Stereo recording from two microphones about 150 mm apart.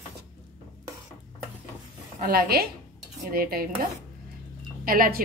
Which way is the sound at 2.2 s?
85° right.